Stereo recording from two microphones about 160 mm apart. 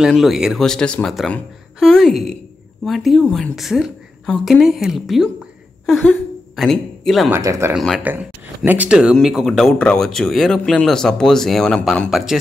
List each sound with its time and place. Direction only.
0.0 s a woman's voice: centre (ahead or behind)
7.2 s speech: 15° right (ahead or behind)
7.7 s speech: centre (ahead or behind)
8.0 s speech: 10° right (ahead or behind)